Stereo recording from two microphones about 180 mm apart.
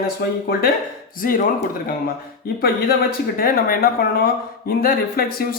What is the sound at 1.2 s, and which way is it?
Speech, 50° left (ahead or behind).